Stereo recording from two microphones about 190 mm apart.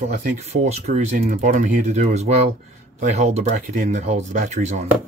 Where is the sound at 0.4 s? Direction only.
35° right (ahead or behind).